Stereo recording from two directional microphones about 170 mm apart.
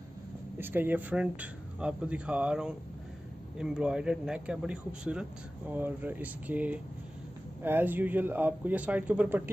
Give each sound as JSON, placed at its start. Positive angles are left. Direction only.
{"t": 0.6, "sound": "a man's voice", "side_deg": -10}